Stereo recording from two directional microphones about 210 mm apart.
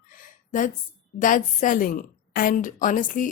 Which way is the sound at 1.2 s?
40° left (ahead or behind).